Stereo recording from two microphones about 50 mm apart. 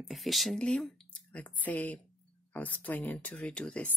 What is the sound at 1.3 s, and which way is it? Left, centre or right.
Speech, left.